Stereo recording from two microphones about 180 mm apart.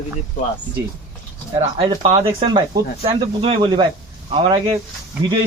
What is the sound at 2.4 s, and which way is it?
Speech, 30° right (ahead or behind).